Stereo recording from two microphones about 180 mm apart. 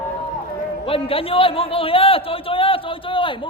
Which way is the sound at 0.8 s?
30° left (ahead or behind).